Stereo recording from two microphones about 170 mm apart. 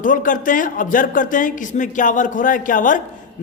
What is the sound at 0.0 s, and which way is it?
A man's voice, 50° left (ahead or behind).